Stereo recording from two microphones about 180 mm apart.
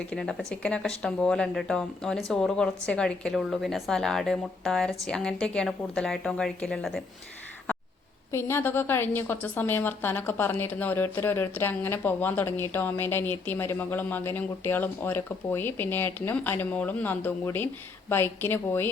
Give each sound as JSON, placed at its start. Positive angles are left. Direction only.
{"t": 0.1, "sound": "speech", "side_deg": 5}
{"t": 8.3, "sound": "a woman's voice", "side_deg": 15}